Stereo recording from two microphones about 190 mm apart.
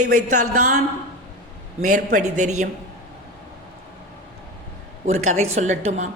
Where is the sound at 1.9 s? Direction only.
40° right (ahead or behind).